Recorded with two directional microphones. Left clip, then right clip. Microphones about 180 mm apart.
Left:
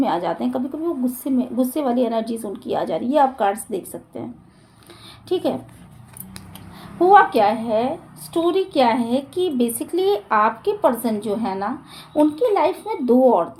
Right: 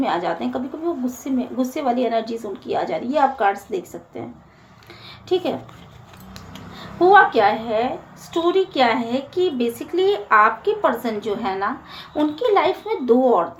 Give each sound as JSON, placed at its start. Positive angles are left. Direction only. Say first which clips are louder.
{"t": 0.0, "sound": "speech", "louder": "left 1 dB", "side_deg": 50}
{"t": 5.3, "sound": "speech", "louder": "even", "side_deg": 50}
{"t": 7.0, "sound": "speech", "louder": "even", "side_deg": 50}